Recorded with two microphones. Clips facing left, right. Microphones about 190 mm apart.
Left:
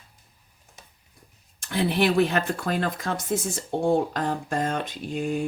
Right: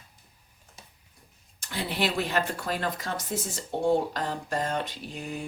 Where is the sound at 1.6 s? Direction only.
55° left (ahead or behind).